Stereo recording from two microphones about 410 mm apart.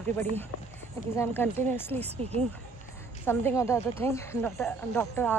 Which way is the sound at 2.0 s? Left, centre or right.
Centre.